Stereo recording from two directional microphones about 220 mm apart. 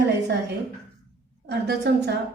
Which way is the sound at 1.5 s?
50° right (ahead or behind).